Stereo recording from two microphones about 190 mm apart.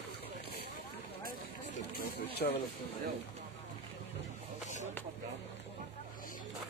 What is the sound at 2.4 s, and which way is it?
Speech, 50° left (ahead or behind).